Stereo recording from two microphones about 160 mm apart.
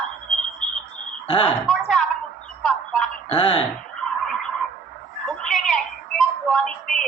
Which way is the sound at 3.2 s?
35° left (ahead or behind).